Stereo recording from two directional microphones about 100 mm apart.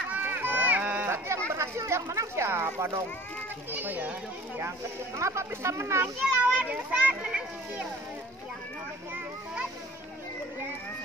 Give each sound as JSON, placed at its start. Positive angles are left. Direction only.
{"t": 0.1, "sound": "run", "side_deg": -20}
{"t": 1.1, "sound": "chatter", "side_deg": -25}
{"t": 1.5, "sound": "a child's voice", "side_deg": -25}
{"t": 4.6, "sound": "speech", "side_deg": -30}
{"t": 6.2, "sound": "a child's voice", "side_deg": -15}